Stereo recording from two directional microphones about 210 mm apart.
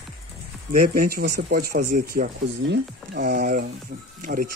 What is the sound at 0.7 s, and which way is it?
Speech, 45° right (ahead or behind).